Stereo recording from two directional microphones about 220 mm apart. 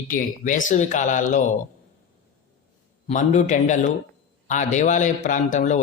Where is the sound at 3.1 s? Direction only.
35° left (ahead or behind).